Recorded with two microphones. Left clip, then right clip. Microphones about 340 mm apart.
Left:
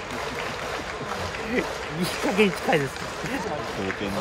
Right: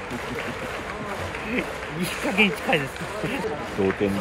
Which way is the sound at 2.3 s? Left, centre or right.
Left.